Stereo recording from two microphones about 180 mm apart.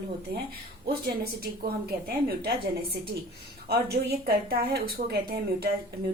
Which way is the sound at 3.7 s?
65° right (ahead or behind).